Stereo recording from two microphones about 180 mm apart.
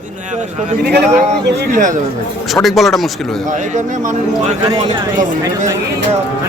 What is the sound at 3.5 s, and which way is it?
A man's voice, 45° right (ahead or behind).